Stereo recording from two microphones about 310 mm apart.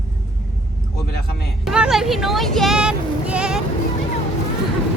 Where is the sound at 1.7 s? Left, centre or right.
Centre.